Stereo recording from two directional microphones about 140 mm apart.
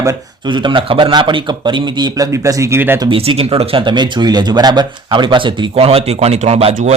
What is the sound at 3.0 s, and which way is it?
Speech, 40° right (ahead or behind).